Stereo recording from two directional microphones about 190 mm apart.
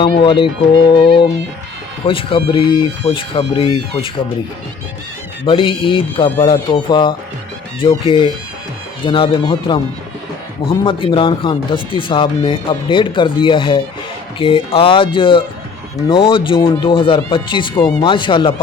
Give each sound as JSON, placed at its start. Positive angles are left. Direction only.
{"t": 0.0, "sound": "speech", "side_deg": 25}
{"t": 5.5, "sound": "speech", "side_deg": 25}